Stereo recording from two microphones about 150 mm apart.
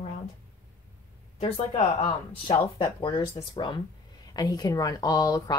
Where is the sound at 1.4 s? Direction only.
40° left (ahead or behind).